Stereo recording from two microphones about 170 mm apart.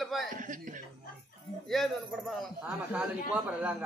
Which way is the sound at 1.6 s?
Centre (ahead or behind).